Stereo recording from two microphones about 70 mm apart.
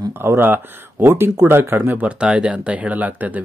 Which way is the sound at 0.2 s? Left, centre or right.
Right.